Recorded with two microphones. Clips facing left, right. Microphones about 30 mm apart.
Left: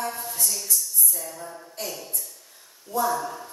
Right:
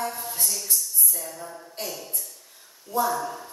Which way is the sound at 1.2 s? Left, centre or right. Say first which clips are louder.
Even; centre.